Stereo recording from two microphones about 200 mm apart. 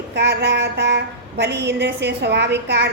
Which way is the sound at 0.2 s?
60° right (ahead or behind).